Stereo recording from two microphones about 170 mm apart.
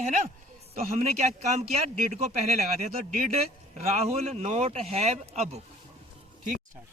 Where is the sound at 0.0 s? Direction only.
50° right (ahead or behind).